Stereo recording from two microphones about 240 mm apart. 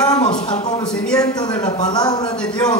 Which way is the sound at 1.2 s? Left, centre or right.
Centre.